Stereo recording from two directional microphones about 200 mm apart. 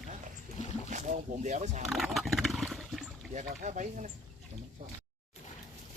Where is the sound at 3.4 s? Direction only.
40° right (ahead or behind).